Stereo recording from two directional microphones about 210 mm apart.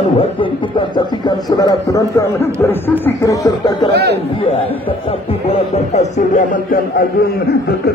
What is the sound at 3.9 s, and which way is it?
Speech, 50° right (ahead or behind).